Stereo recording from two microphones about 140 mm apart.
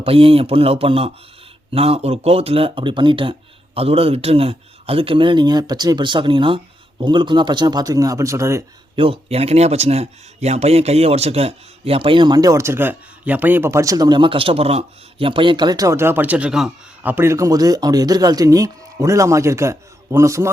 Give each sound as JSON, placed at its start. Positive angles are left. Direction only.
{"t": 0.0, "sound": "a man's voice", "side_deg": -45}
{"t": 9.0, "sound": "a man's voice", "side_deg": -45}